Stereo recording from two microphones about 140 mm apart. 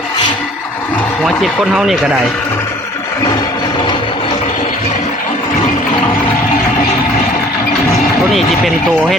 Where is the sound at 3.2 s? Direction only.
30° left (ahead or behind).